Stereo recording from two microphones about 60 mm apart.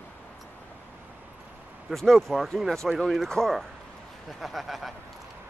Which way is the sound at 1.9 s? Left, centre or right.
Centre.